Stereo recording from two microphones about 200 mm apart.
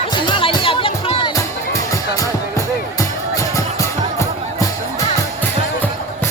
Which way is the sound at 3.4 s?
15° left (ahead or behind).